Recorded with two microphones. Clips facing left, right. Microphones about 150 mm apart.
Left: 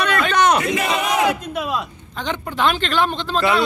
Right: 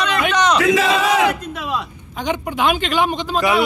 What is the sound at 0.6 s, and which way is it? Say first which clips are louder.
Battle cry: right 5 dB; 90° right.